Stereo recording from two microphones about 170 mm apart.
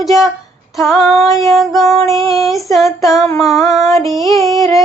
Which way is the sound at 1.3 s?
20° left (ahead or behind).